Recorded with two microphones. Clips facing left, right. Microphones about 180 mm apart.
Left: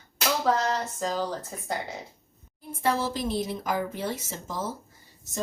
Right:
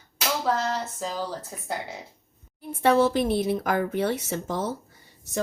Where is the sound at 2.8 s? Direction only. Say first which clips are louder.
Right 7 dB; 65° right (ahead or behind).